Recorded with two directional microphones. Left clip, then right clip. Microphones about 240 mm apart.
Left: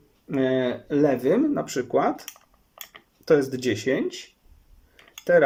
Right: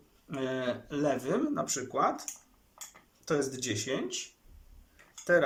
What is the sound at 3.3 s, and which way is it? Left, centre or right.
Speech, left.